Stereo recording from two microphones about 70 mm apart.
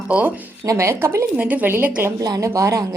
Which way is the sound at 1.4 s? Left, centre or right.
Right.